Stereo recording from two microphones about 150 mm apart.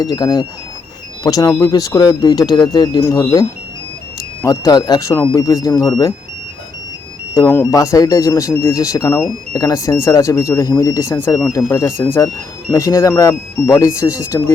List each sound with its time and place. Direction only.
0.0 s speech: 25° left (ahead or behind)
3.0 s speech: 20° left (ahead or behind)
4.4 s speech: 25° left (ahead or behind)
7.3 s speech: 20° left (ahead or behind)